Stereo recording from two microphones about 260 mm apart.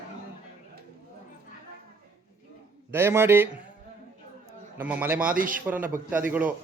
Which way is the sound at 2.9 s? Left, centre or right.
Centre.